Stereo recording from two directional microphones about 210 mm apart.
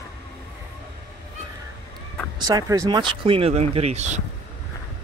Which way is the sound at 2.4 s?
15° right (ahead or behind).